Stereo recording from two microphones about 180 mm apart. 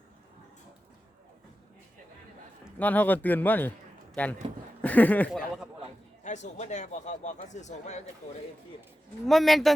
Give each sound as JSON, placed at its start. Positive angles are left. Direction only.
{"t": 2.7, "sound": "a man's voice", "side_deg": 10}
{"t": 6.2, "sound": "a man's voice", "side_deg": 40}
{"t": 9.2, "sound": "speech", "side_deg": 0}